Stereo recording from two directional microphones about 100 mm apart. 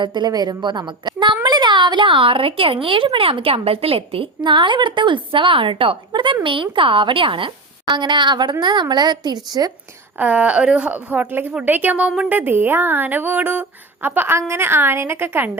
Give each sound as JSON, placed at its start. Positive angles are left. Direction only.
{"t": 0.0, "sound": "a woman's voice", "side_deg": -50}
{"t": 6.1, "sound": "speech", "side_deg": -45}
{"t": 10.2, "sound": "a woman's voice", "side_deg": -15}